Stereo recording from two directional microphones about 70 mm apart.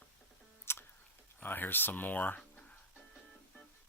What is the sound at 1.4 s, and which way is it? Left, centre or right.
Speech, left.